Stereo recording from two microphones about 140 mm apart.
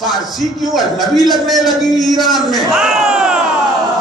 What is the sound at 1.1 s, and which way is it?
A man's voice, centre (ahead or behind).